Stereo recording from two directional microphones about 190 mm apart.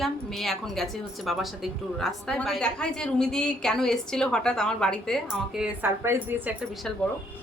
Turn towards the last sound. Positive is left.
turn(degrees=-5)  # may be behind; listen again after turning